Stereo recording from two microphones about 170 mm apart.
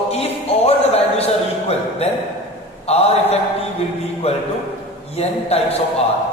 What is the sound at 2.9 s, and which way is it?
Speech, 35° left (ahead or behind).